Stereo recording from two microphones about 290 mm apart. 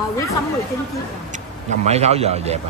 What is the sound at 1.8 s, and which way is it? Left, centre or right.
Speech, right.